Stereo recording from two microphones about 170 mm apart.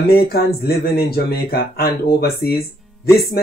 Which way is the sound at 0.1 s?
65° left (ahead or behind).